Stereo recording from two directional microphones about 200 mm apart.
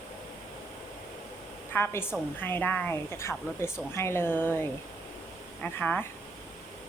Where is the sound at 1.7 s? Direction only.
10° left (ahead or behind).